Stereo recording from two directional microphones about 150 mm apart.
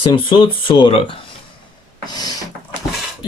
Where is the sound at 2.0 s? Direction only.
25° left (ahead or behind).